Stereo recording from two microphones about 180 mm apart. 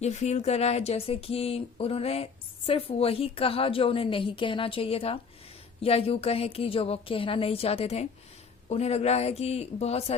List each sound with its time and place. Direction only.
0.0 s speech: 40° left (ahead or behind)